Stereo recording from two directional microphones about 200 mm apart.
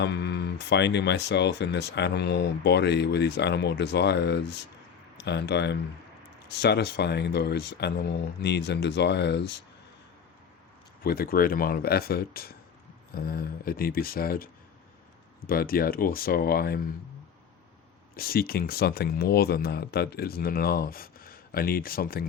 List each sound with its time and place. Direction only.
0.0 s speech: 55° left (ahead or behind)
11.0 s speech: 50° left (ahead or behind)
18.2 s speech: 50° left (ahead or behind)